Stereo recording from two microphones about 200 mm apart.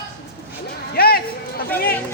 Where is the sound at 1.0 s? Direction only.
50° left (ahead or behind).